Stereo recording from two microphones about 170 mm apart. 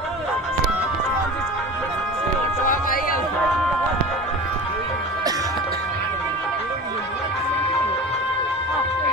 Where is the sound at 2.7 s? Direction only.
55° left (ahead or behind).